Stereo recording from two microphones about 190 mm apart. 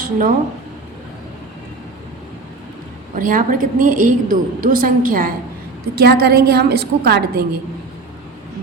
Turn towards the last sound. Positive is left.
turn(degrees=-55)  # may be behind; listen again after turning